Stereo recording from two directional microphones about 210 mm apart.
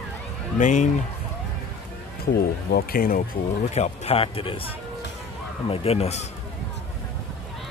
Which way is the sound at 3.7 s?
30° left (ahead or behind).